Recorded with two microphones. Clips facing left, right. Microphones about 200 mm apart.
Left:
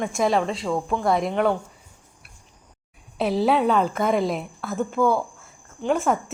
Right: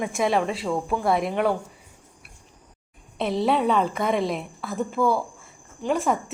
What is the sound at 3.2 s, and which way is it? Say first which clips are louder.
A woman's voice: left 2 dB; 5° left (ahead or behind).